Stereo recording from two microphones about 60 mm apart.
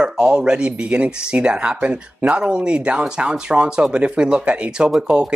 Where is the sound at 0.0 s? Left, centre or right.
Centre.